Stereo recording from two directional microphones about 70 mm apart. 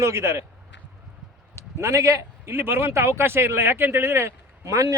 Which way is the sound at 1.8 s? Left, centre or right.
Right.